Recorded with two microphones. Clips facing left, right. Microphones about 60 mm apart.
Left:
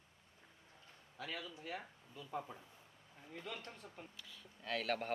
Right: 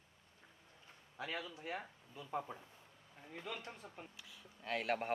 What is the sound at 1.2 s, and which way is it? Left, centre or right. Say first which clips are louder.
Speech: right 2 dB; centre.